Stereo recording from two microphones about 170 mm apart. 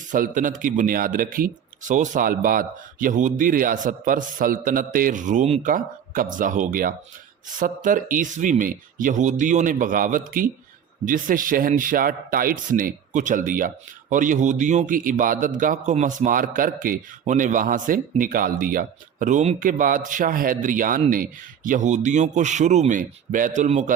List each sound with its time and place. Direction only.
0.1 s speech: 50° right (ahead or behind)